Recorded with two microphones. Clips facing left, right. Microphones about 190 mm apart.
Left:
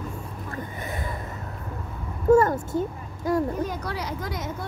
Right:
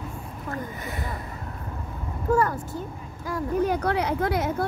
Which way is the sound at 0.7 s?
50° left (ahead or behind).